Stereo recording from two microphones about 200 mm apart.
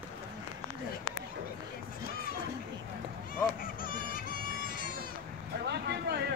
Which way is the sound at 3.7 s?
45° left (ahead or behind).